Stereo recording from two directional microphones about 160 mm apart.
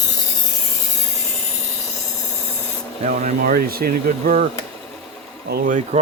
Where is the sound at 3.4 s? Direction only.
70° right (ahead or behind).